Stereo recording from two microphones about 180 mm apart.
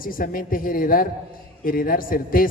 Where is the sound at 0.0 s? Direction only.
50° left (ahead or behind).